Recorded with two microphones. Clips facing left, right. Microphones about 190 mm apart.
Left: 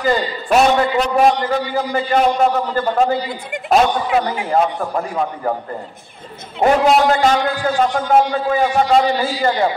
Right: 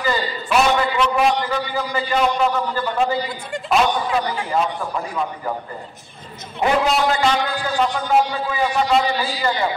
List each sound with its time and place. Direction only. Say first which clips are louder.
0.0 s a man's voice: left 4 dB; 45° left (ahead or behind)
4.5 s a man's voice: left 4 dB; 50° left (ahead or behind)
6.6 s a man's voice: left 5 dB; 45° left (ahead or behind)